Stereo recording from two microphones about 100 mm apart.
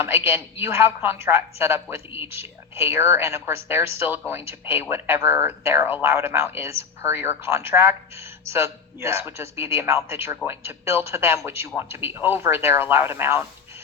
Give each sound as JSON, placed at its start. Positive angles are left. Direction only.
{"t": 0.0, "sound": "speech", "side_deg": -25}